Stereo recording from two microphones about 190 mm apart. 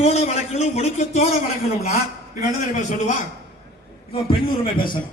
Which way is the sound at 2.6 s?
40° left (ahead or behind).